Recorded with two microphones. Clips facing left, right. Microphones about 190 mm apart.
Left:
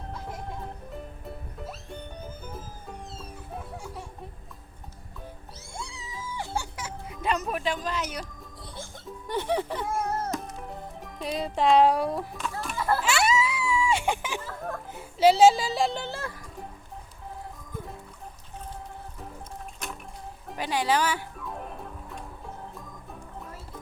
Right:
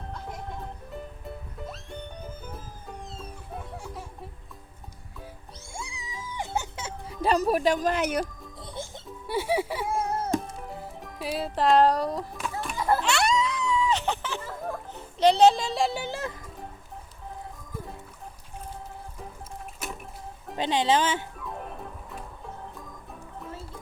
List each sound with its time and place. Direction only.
0.1 s music: centre (ahead or behind)
3.5 s music: centre (ahead or behind)
5.7 s music: 10° right (ahead or behind); by 8.3 s 55° right (ahead or behind)
9.2 s music: 10° right (ahead or behind)
12.7 s children playing: 15° right (ahead or behind)
13.0 s a sound: 5° left (ahead or behind); by 16.5 s 20° right (ahead or behind)
19.8 s a sound: 5° right (ahead or behind)
20.6 s speech: 25° right (ahead or behind)
21.3 s music: centre (ahead or behind)